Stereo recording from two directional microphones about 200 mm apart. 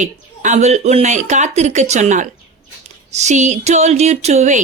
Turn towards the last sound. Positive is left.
turn(degrees=-35)  # may be behind; listen again after turning